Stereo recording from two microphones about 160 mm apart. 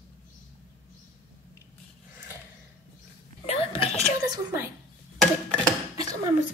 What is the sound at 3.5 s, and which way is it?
Whispering, 35° left (ahead or behind).